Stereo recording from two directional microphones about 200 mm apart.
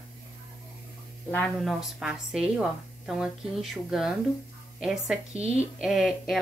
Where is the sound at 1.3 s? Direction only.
5° left (ahead or behind).